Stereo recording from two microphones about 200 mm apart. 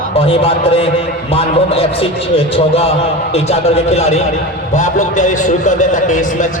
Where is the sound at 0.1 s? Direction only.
30° left (ahead or behind).